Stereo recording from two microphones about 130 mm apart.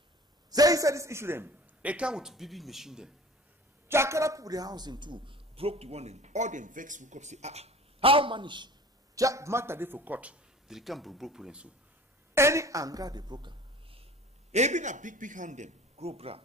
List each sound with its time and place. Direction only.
0.5 s a man's voice: 30° right (ahead or behind); by 3.1 s 5° right (ahead or behind)
3.9 s a man's voice: 20° right (ahead or behind)
12.4 s a woman's voice: 20° right (ahead or behind); by 14.0 s 40° right (ahead or behind)
14.5 s a man's voice: 65° right (ahead or behind)